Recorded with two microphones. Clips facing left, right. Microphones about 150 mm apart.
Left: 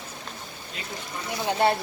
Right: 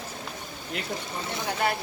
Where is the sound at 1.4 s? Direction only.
30° left (ahead or behind).